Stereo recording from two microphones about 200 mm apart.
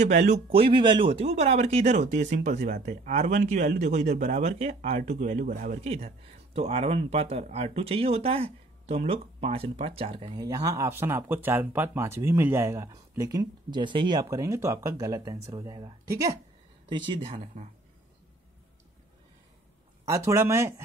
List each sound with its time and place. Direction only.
0.0 s speech: 35° right (ahead or behind)
20.1 s speech: 15° right (ahead or behind)